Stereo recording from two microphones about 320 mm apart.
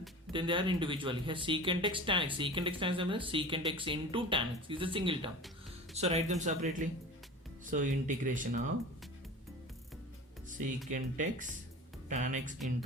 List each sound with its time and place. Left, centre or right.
0.3 s speech: centre
10.8 s speech: right